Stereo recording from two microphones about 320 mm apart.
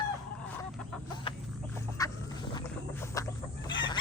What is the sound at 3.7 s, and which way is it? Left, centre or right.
Chicken, centre.